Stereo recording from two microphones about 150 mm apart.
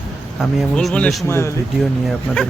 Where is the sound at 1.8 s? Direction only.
5° left (ahead or behind).